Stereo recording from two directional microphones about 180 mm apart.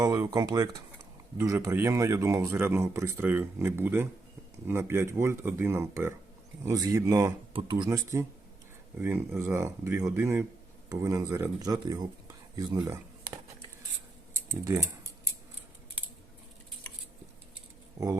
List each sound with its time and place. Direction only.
0.0 s speech: 20° right (ahead or behind)
7.9 s speech: 15° right (ahead or behind)
12.5 s a sound: 20° right (ahead or behind)
14.3 s typing: 15° right (ahead or behind)